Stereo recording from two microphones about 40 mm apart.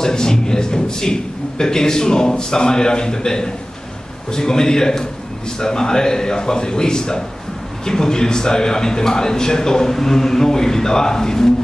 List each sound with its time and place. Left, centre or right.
0.0 s a man's voice: centre